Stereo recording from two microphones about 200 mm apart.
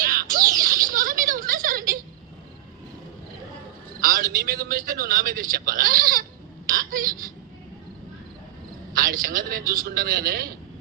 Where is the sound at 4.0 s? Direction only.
45° right (ahead or behind).